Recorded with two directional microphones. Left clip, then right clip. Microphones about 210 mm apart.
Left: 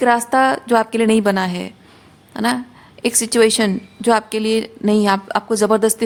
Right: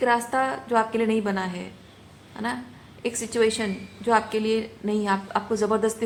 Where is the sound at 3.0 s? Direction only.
60° left (ahead or behind).